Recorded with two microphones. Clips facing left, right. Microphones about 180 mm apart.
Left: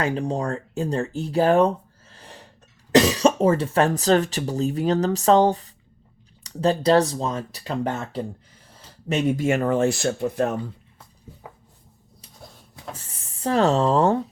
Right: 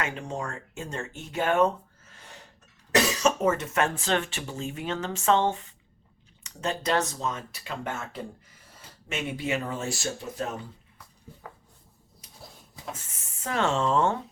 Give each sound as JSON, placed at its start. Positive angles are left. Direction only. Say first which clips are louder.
{"t": 0.0, "sound": "speech", "louder": "left 8 dB", "side_deg": 35}
{"t": 12.4, "sound": "a sound", "louder": "left 2 dB", "side_deg": 0}
{"t": 12.9, "sound": "speech", "louder": "left 2 dB", "side_deg": 35}